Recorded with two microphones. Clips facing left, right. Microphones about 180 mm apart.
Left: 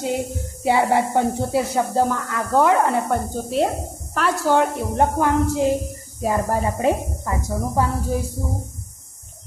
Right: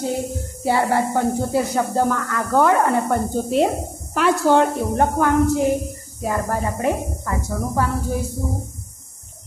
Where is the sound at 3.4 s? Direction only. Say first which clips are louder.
Right 1 dB; centre (ahead or behind).